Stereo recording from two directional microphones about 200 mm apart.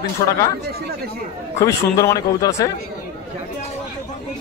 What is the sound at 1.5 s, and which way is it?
Speech, 15° left (ahead or behind).